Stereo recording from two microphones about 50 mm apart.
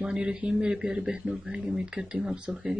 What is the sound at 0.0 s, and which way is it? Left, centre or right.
Speech, centre.